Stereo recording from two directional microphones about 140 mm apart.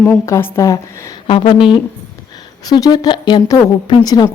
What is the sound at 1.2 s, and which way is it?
A woman's voice, 35° left (ahead or behind).